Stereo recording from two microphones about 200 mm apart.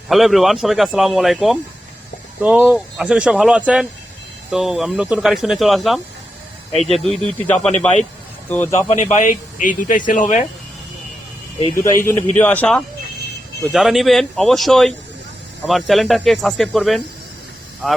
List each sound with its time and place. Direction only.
0.1 s a man's voice: centre (ahead or behind)
9.0 s speech: 40° left (ahead or behind)
11.8 s a man's voice: 15° left (ahead or behind)